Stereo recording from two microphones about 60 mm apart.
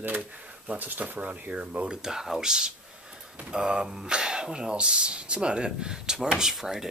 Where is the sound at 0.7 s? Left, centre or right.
Right.